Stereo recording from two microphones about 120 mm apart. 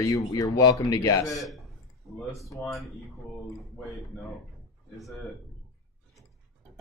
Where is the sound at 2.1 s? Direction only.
Centre (ahead or behind).